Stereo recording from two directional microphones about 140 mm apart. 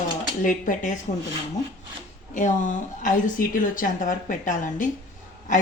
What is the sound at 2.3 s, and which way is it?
A woman's voice, 65° left (ahead or behind).